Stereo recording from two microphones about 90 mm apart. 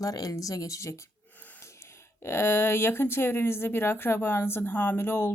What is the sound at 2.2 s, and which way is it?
Speech, 25° left (ahead or behind).